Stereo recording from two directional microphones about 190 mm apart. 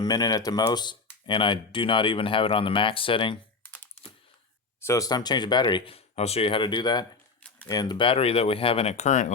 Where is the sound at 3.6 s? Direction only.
10° left (ahead or behind).